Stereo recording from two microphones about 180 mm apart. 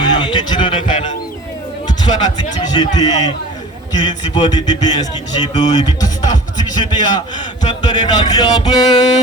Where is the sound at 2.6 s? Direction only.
25° left (ahead or behind).